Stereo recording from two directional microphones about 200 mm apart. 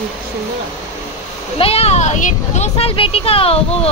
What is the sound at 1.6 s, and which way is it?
Speech, 30° left (ahead or behind).